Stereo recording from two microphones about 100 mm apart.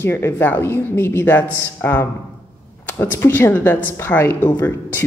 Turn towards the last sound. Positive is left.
turn(degrees=20)  # may be behind; listen again after turning